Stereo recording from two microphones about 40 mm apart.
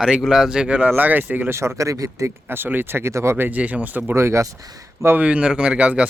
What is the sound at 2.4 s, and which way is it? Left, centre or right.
Speech, right.